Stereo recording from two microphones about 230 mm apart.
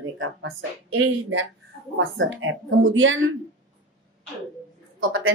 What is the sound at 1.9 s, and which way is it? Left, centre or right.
Speech, right.